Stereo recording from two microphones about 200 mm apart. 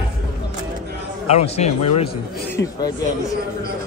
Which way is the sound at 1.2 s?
30° left (ahead or behind).